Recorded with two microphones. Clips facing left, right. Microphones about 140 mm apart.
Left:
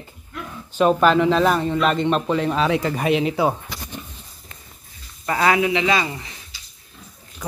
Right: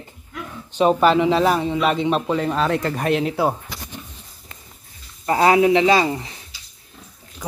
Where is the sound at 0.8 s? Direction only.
5° right (ahead or behind).